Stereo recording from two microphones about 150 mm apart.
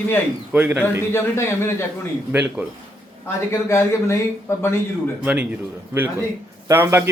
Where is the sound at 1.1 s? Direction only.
15° left (ahead or behind).